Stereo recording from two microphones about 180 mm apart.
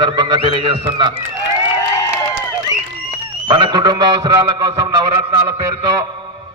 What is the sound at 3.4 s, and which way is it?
A man's voice, 25° right (ahead or behind).